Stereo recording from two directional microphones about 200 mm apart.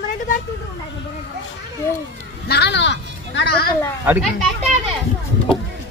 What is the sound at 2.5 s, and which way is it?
Speech, 60° left (ahead or behind).